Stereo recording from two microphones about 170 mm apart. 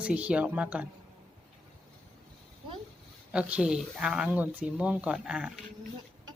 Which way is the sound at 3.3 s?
5° right (ahead or behind).